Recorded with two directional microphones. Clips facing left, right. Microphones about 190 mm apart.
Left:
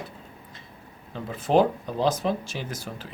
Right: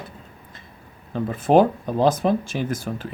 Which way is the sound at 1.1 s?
50° right (ahead or behind).